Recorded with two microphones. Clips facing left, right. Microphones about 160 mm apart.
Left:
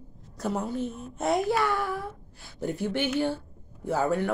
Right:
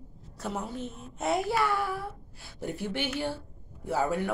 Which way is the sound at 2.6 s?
45° left (ahead or behind).